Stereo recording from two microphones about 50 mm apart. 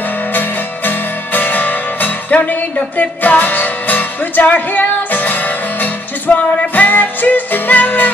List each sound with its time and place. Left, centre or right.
0.3 s music: left